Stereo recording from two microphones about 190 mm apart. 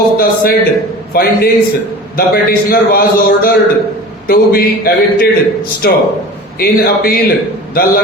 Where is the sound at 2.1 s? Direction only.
50° left (ahead or behind).